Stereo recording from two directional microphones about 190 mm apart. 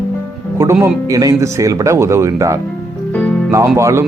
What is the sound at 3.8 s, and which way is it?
Speech, 15° right (ahead or behind).